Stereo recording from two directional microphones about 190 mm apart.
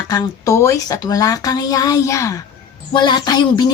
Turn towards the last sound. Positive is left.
turn(degrees=20)  # may be behind; listen again after turning